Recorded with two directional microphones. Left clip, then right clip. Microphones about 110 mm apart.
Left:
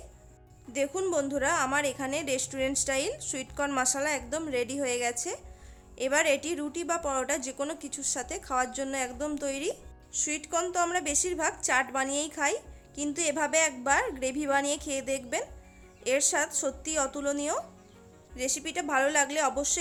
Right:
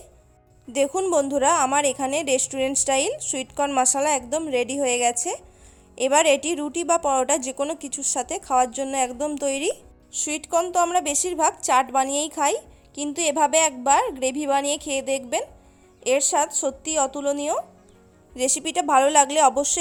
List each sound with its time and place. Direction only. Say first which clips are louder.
0.7 s a woman's voice: right 8 dB; 60° right (ahead or behind); by 17.6 s 30° right (ahead or behind)
18.3 s a woman's voice: right 9 dB; 60° right (ahead or behind)